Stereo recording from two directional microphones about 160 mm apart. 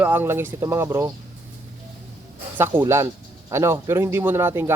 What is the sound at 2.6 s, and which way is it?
Speech, 15° right (ahead or behind).